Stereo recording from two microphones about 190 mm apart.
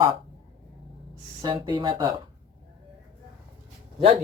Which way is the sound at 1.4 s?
20° right (ahead or behind).